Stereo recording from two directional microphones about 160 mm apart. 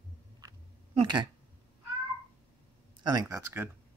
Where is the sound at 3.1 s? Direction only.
25° right (ahead or behind).